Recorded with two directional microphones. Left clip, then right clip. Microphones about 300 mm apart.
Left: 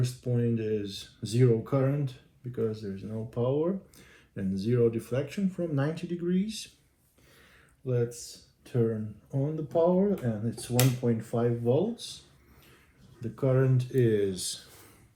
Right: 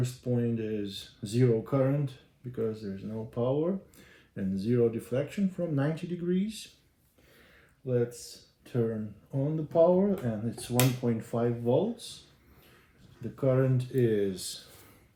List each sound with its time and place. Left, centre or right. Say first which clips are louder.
0.0 s speech: even; centre
8.6 s speech: left 2 dB; centre
13.2 s speech: even; centre